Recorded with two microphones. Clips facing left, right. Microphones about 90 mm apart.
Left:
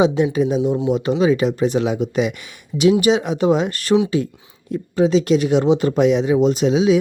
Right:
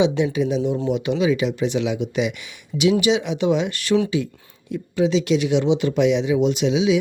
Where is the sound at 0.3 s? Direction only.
40° left (ahead or behind).